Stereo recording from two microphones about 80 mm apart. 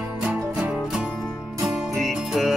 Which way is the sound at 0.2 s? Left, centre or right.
Centre.